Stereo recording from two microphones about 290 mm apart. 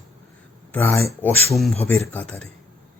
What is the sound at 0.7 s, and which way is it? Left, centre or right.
Speech, centre.